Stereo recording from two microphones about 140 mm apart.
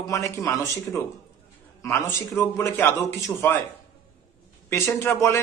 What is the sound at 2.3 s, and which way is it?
A man's voice, 20° left (ahead or behind).